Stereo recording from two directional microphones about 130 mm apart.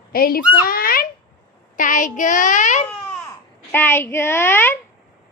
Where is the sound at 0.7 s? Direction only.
90° left; by 2.8 s 70° left (ahead or behind).